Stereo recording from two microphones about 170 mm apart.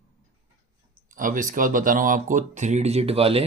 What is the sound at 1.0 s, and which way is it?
Speech, 50° right (ahead or behind).